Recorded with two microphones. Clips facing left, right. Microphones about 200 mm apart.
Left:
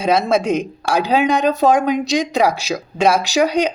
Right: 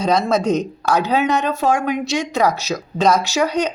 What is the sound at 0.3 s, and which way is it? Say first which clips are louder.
A woman's voice: left 1 dB; 10° left (ahead or behind).